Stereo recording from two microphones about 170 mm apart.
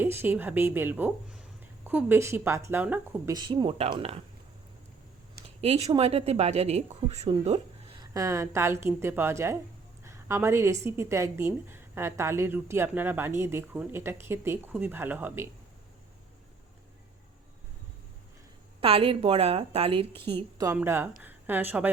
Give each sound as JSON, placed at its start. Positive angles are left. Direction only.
{"t": 0.0, "sound": "a woman's voice", "side_deg": -10}
{"t": 3.3, "sound": "a woman's voice", "side_deg": -25}
{"t": 5.5, "sound": "a woman's voice", "side_deg": -40}
{"t": 7.9, "sound": "a woman's voice", "side_deg": -20}
{"t": 18.8, "sound": "a woman's voice", "side_deg": -35}
{"t": 20.7, "sound": "a woman's voice", "side_deg": -15}